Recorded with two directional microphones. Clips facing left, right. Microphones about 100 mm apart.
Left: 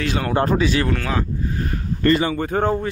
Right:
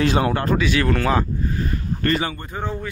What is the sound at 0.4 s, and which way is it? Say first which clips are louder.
Speech: left 2 dB; 30° left (ahead or behind).